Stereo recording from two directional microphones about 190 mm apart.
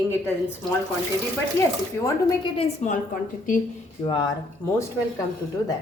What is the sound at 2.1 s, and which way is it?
A woman's voice, 25° left (ahead or behind).